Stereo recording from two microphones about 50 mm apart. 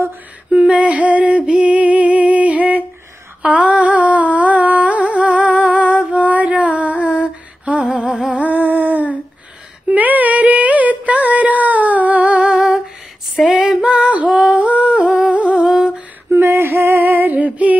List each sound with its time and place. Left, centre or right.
0.5 s music: right
3.4 s humming: right
8.3 s a sound: right
13.5 s female singing: centre
13.8 s female singing: right
14.4 s humming: right
16.3 s female singing: right